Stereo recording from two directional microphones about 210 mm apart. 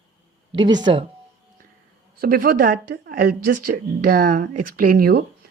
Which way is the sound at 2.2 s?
45° right (ahead or behind).